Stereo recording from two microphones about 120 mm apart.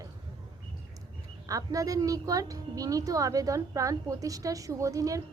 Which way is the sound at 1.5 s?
30° right (ahead or behind).